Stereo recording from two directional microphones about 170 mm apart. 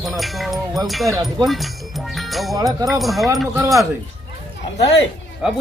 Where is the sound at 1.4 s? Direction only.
Centre (ahead or behind).